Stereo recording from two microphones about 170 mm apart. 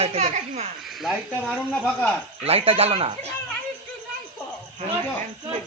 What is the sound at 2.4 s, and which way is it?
Speech, 35° right (ahead or behind).